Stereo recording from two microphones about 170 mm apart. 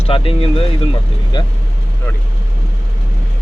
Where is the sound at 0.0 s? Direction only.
35° left (ahead or behind).